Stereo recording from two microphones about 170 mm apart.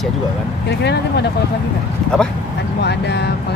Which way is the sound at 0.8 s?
80° left.